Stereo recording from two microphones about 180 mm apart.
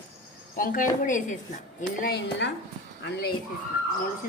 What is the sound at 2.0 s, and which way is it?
Speech, 75° left (ahead or behind).